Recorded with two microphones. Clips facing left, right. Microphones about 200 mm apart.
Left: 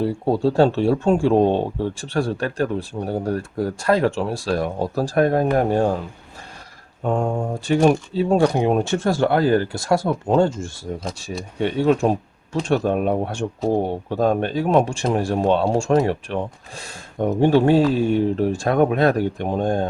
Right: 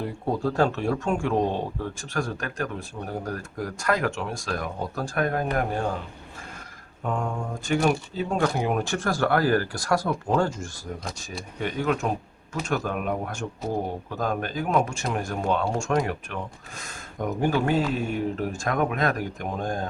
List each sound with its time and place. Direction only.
0.0 s speech: 30° left (ahead or behind)
7.0 s speech: 30° left (ahead or behind)